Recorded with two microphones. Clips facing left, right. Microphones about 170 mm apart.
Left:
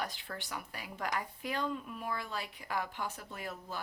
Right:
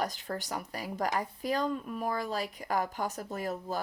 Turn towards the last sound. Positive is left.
turn(degrees=-40)  # may be behind; listen again after turning